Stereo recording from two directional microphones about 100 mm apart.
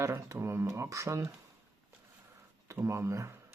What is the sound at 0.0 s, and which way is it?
Speech, 25° right (ahead or behind).